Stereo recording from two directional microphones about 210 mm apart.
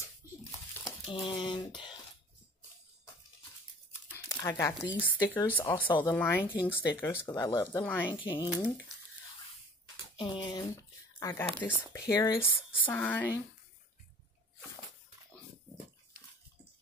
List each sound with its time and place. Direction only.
0.0 s crumpling: 15° left (ahead or behind)
1.1 s speech: 25° left (ahead or behind)
4.4 s speech: 15° left (ahead or behind)
5.9 s speech: 25° left (ahead or behind)
6.1 s speech: 10° left (ahead or behind)
8.2 s speech: 25° left (ahead or behind)
10.1 s speech: 20° left (ahead or behind)